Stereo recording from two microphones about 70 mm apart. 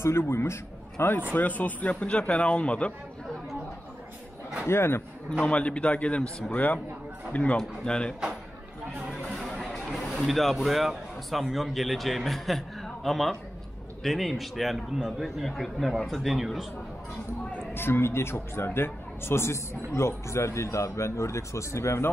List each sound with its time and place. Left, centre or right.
0.0 s a man's voice: left
1.3 s speech: left
4.6 s speech: left
5.4 s a man's voice: centre
7.3 s a man's voice: centre
9.4 s music: centre
10.1 s speech: centre
17.5 s speech: left